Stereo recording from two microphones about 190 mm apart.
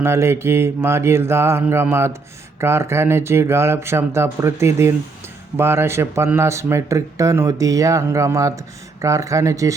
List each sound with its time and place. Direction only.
0.0 s speech: 15° right (ahead or behind)